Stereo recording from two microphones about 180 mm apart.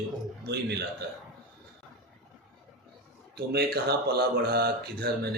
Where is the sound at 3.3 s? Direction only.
60° right (ahead or behind).